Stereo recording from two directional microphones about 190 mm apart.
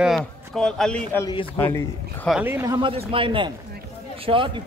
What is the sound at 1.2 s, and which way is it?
Speech, 20° left (ahead or behind).